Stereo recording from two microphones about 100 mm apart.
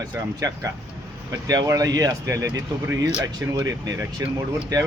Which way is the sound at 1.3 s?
35° right (ahead or behind).